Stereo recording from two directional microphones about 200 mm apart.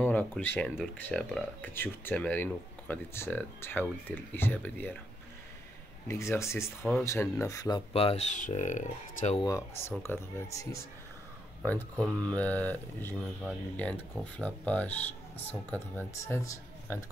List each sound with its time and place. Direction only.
0.0 s speech: 10° left (ahead or behind)
6.0 s speech: 15° left (ahead or behind)
7.9 s speech: 30° left (ahead or behind)
9.4 s speech: 15° left (ahead or behind)